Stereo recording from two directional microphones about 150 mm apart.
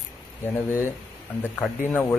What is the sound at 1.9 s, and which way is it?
Speech, 10° left (ahead or behind).